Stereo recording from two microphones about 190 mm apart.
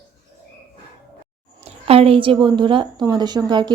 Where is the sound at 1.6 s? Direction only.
30° right (ahead or behind).